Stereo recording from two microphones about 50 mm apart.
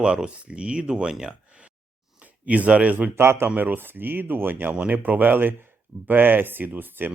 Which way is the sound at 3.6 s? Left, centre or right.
Right.